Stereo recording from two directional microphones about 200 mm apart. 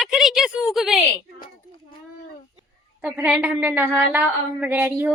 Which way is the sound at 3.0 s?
5° right (ahead or behind).